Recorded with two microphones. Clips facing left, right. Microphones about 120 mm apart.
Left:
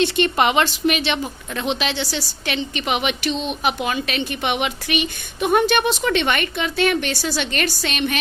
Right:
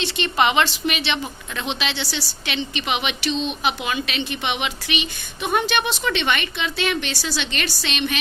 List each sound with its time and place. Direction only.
0.0 s speech: 50° left (ahead or behind)